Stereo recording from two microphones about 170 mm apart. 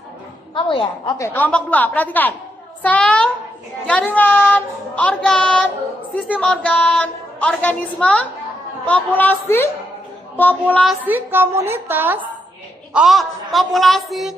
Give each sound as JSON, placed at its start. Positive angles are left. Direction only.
{"t": 0.6, "sound": "a woman's voice", "side_deg": 30}
{"t": 1.1, "sound": "a woman's voice", "side_deg": 15}
{"t": 11.1, "sound": "a woman's voice", "side_deg": -10}
{"t": 12.9, "sound": "a woman's voice", "side_deg": 0}